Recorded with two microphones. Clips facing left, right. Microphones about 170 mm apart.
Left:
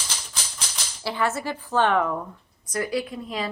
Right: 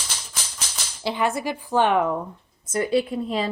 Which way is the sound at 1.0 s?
15° right (ahead or behind).